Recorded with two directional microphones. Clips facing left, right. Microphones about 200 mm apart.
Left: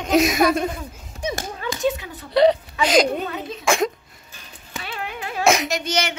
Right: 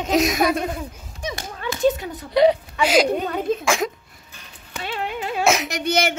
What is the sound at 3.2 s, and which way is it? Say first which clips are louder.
Speech: right 6 dB; 50° right (ahead or behind).